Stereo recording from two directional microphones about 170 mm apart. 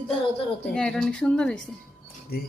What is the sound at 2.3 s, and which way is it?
Speech, 65° left (ahead or behind).